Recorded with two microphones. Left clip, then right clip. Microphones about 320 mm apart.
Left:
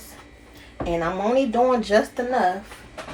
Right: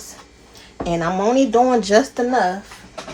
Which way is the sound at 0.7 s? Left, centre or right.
Right.